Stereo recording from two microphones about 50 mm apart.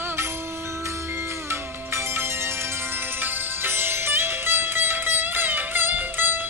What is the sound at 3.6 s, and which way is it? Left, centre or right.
Music, right.